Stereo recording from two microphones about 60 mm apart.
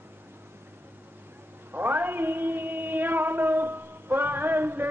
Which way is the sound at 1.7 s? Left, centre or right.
Right.